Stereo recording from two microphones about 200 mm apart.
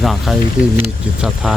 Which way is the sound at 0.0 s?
Centre (ahead or behind).